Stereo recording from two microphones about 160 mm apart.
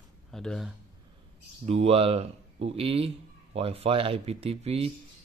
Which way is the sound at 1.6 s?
40° right (ahead or behind).